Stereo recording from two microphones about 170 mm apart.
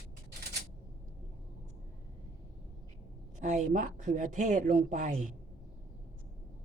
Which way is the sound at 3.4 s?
50° right (ahead or behind).